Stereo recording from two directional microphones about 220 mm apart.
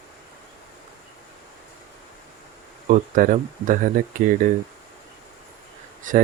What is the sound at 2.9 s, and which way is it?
Speech, 35° right (ahead or behind).